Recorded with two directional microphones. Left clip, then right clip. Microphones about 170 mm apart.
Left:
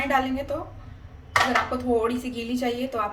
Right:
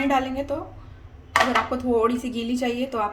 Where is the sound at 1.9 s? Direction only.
40° right (ahead or behind).